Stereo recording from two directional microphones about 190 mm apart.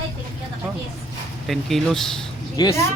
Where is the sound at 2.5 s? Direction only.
20° left (ahead or behind).